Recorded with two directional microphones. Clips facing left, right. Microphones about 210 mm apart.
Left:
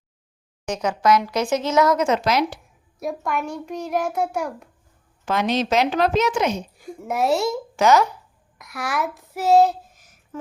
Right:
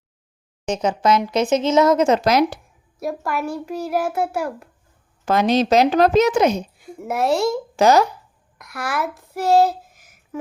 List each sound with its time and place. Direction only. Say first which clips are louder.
0.7 s speech: right 1 dB; 25° right (ahead or behind); by 2.6 s 40° right (ahead or behind)
3.0 s a child's voice: right 1 dB; centre (ahead or behind)
5.2 s speech: right 5 dB; 40° right (ahead or behind)
7.0 s a child's voice: right 2 dB; centre (ahead or behind)
7.8 s speech: right 2 dB; 35° right (ahead or behind)
8.5 s speech: right 1 dB; centre (ahead or behind)